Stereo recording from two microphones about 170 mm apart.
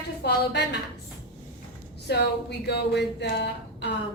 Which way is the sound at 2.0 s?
75° left (ahead or behind).